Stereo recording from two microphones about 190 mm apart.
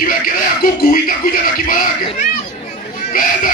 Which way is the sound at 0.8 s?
50° left (ahead or behind).